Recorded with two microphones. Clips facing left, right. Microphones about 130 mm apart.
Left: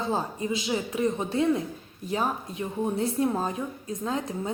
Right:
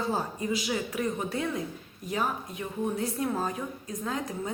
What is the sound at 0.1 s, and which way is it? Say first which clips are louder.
A woman's voice: left 2 dB; 25° left (ahead or behind).